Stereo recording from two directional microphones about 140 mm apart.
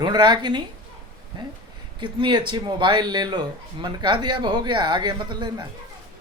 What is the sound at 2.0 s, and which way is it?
A man's voice, 35° right (ahead or behind).